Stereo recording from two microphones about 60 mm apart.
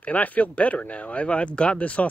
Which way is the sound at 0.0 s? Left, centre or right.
Left.